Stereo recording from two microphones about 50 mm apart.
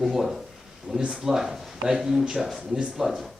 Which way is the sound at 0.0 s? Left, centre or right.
Centre.